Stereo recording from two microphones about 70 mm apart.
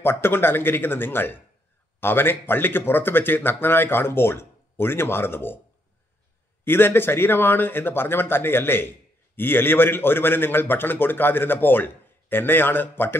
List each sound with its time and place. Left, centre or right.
0.0 s speech: left
6.6 s a man's voice: left